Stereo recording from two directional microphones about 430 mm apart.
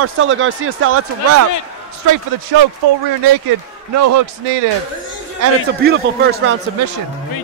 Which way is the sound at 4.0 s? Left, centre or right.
Right.